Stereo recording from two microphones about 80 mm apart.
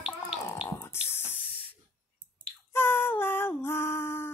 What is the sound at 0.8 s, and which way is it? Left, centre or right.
Spray, left.